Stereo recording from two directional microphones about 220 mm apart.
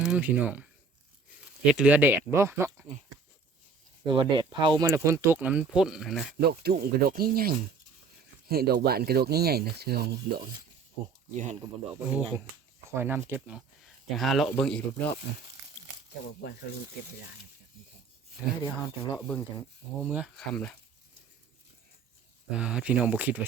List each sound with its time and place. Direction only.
0.0 s speech: 5° right (ahead or behind)
4.0 s speech: 20° right (ahead or behind); by 6.2 s centre (ahead or behind)
6.4 s speech: 45° right (ahead or behind)
11.9 s speech: 5° right (ahead or behind)
19.1 s speech: 10° left (ahead or behind)
20.1 s speech: 5° right (ahead or behind)
22.4 s speech: 5° right (ahead or behind)